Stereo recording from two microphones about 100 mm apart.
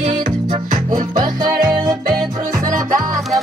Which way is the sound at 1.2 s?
45° right (ahead or behind).